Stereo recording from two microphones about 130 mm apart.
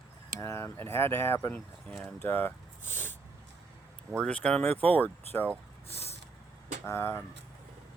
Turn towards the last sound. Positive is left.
turn(degrees=20)  # may be behind; listen again after turning